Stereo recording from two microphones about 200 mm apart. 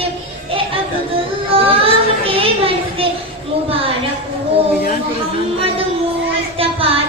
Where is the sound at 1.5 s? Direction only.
30° right (ahead or behind).